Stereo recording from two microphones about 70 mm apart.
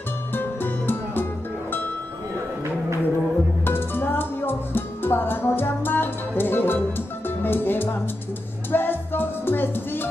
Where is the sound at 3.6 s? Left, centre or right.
Left.